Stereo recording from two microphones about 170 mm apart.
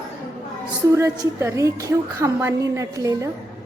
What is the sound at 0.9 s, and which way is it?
A woman's voice, 15° right (ahead or behind).